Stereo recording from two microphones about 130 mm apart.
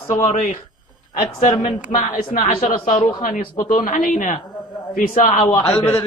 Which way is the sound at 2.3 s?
70° left (ahead or behind).